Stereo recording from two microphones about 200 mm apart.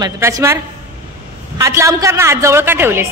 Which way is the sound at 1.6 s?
15° right (ahead or behind).